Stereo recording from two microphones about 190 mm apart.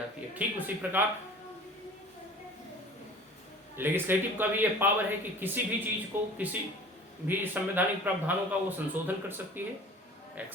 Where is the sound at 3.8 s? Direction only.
10° right (ahead or behind).